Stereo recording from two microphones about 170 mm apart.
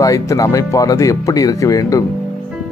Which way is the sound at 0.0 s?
20° left (ahead or behind).